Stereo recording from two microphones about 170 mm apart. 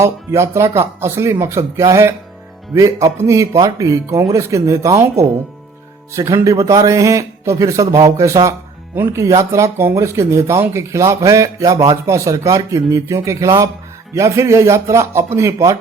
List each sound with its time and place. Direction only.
0.0 s a man's voice: 15° right (ahead or behind)